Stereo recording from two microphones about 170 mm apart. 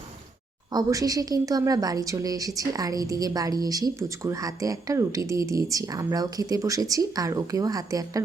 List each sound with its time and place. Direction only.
0.7 s speech: 20° right (ahead or behind)